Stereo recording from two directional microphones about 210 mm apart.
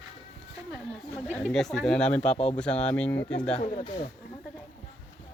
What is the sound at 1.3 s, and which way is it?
Speech, 5° left (ahead or behind).